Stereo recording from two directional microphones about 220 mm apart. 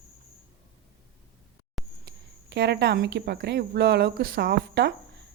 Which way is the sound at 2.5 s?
50° right (ahead or behind).